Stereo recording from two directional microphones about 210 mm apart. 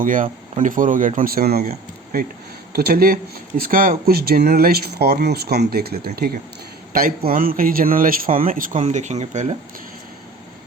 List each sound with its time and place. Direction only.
0.0 s speech: 40° right (ahead or behind)
2.7 s speech: 45° right (ahead or behind)